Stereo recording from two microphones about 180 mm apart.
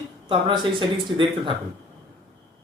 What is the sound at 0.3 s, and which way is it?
Speech, 25° right (ahead or behind).